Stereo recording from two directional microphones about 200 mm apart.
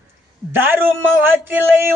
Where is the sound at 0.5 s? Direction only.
10° right (ahead or behind).